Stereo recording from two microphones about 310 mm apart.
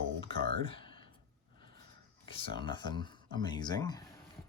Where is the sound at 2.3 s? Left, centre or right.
Centre.